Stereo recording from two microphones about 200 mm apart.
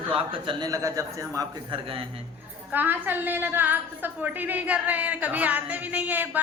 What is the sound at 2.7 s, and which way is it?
A woman's voice, 10° right (ahead or behind).